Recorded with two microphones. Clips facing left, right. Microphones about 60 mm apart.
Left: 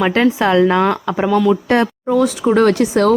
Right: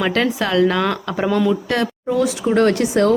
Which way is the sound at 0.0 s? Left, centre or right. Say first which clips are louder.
Left 5 dB; left.